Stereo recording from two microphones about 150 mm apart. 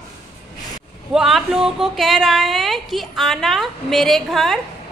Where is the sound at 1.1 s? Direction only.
5° right (ahead or behind).